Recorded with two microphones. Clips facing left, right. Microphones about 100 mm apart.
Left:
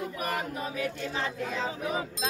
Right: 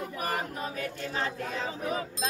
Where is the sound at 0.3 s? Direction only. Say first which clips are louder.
Even; 40° right (ahead or behind).